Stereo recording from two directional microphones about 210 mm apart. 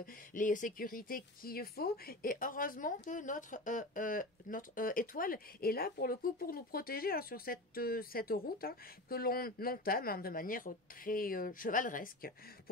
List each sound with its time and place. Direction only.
0.0 s speech: 40° left (ahead or behind)